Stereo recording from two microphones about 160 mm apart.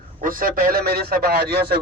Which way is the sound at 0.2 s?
60° right (ahead or behind).